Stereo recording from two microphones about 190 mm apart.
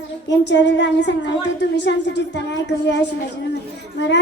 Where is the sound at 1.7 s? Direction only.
65° left (ahead or behind).